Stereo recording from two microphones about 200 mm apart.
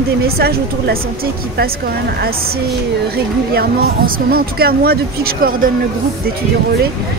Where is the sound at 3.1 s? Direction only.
50° right (ahead or behind).